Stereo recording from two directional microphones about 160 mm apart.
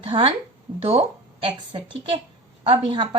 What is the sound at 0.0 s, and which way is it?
A woman's voice, 35° right (ahead or behind).